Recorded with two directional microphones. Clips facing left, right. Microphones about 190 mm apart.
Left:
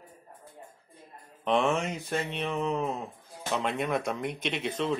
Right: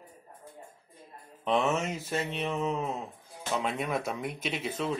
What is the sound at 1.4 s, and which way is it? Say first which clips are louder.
Speech: left 1 dB; 5° right (ahead or behind).